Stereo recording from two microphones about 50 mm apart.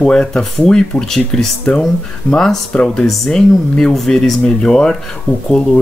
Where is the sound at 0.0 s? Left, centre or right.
Centre.